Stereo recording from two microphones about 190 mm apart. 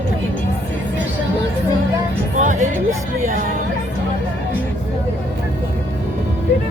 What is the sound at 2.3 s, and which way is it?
Speech, 40° right (ahead or behind).